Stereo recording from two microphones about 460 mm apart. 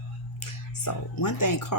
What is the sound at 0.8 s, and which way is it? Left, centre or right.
Speech, left.